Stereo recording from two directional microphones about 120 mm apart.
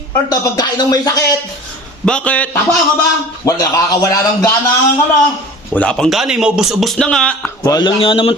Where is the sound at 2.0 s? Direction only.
10° left (ahead or behind).